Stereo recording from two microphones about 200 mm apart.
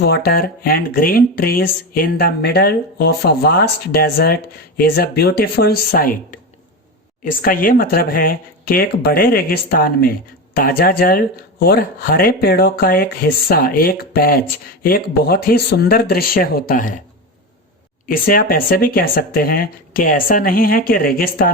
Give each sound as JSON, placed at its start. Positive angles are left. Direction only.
{"t": 0.0, "sound": "speech", "side_deg": 50}
{"t": 18.1, "sound": "speech", "side_deg": 45}